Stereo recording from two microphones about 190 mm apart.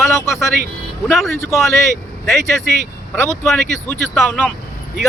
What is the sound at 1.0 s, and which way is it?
Speech, 10° left (ahead or behind).